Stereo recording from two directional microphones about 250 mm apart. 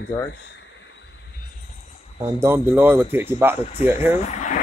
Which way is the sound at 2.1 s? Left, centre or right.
Centre.